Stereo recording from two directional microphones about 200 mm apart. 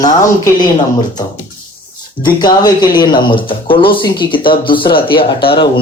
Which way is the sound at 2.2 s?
20° left (ahead or behind).